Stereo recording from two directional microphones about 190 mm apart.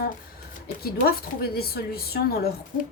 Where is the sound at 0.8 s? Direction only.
55° left (ahead or behind).